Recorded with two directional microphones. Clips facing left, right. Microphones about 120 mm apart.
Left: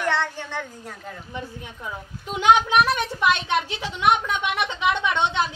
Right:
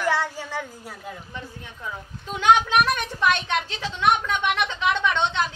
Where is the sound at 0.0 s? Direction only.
5° right (ahead or behind).